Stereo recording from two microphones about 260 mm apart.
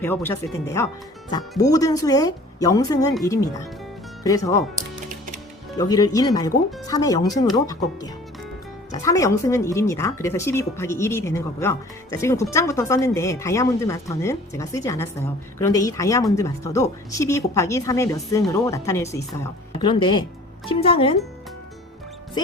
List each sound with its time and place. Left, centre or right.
0.0 s speech: centre
5.7 s speech: centre